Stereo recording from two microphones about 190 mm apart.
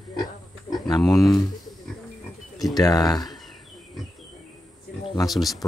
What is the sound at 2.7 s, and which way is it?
Speech, 20° left (ahead or behind).